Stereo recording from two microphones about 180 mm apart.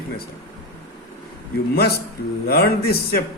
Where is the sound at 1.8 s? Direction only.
60° left (ahead or behind).